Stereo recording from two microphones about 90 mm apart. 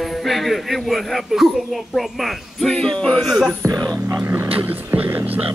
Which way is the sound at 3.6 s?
40° right (ahead or behind).